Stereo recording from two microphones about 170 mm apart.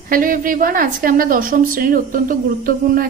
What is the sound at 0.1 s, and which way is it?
A woman's voice, 55° right (ahead or behind).